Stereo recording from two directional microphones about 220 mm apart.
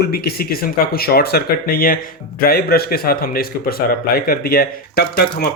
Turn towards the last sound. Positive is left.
turn(degrees=45)  # may be behind; listen again after turning